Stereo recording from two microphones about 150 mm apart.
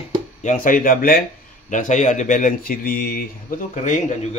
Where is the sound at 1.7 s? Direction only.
55° left (ahead or behind).